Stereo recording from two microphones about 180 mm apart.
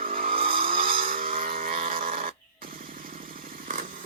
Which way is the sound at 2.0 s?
50° right (ahead or behind).